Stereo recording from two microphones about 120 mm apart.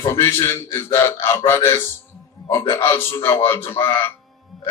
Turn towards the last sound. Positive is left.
turn(degrees=20)  # may be behind; listen again after turning